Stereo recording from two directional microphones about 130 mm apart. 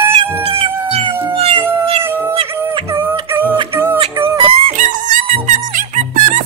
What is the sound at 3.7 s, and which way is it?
Music, 15° right (ahead or behind).